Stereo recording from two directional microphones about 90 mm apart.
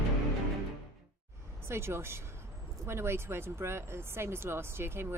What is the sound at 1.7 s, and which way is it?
Speech, 30° right (ahead or behind).